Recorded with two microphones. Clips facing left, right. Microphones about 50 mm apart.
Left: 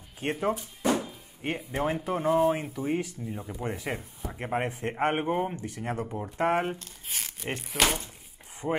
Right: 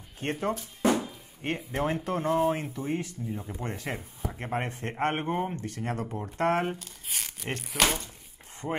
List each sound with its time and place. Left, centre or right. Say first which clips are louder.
0.2 s speech: left 2 dB; centre